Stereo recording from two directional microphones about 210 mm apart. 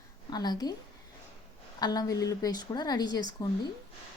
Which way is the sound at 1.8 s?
20° left (ahead or behind).